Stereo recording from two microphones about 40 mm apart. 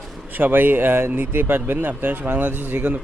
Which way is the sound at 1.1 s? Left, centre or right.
Right.